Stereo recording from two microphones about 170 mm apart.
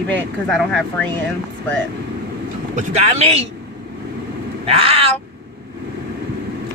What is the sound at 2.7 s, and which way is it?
Speech, 40° right (ahead or behind).